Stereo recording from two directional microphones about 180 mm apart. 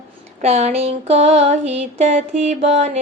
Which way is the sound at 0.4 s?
35° right (ahead or behind).